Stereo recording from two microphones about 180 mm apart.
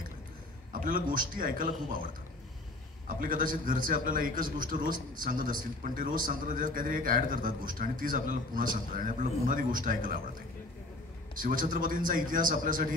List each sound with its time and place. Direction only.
0.7 s a man's voice: 50° right (ahead or behind)
3.1 s a man's voice: 50° right (ahead or behind)
11.3 s a man's voice: 50° right (ahead or behind)